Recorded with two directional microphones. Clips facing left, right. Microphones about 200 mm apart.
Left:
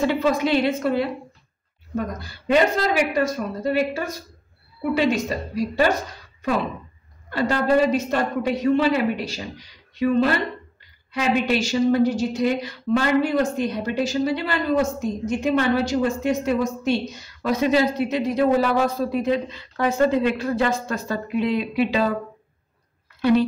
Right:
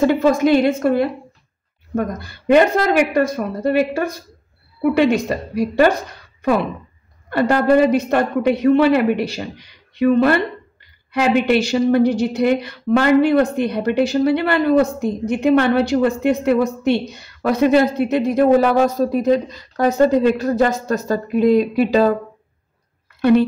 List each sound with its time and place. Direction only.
0.0 s a woman's voice: 45° right (ahead or behind)
7.2 s speech: 60° right (ahead or behind); by 22.1 s 45° right (ahead or behind)